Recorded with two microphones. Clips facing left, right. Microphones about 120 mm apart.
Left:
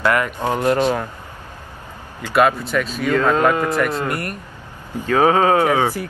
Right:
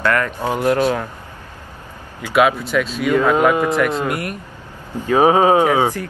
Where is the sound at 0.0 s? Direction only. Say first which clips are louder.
Even; 15° left (ahead or behind).